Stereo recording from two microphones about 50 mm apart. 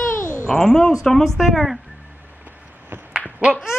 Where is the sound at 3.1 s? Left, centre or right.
Right.